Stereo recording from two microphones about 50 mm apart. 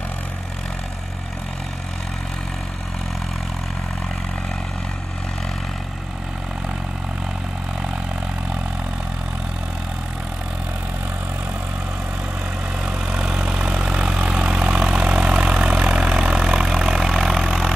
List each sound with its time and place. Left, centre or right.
13.0 s vehicle: centre